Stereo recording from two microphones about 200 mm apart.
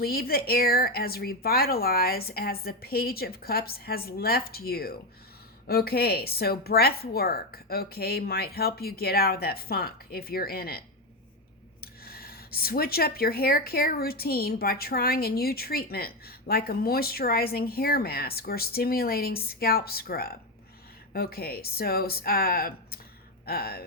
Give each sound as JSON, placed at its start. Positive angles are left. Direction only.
{"t": 0.0, "sound": "speech", "side_deg": 50}